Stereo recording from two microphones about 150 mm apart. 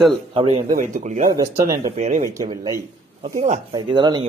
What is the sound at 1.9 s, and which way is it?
Speech, 50° right (ahead or behind).